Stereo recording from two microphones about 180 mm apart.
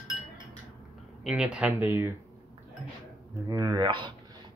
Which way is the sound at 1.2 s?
5° right (ahead or behind).